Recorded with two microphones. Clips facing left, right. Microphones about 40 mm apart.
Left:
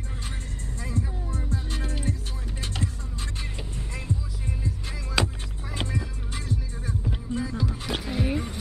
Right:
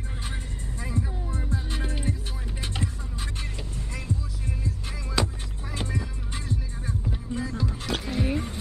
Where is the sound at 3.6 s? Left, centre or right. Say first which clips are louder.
Even; centre.